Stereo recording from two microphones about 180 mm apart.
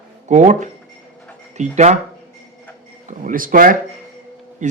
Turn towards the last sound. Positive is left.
turn(degrees=-45)  # may be behind; listen again after turning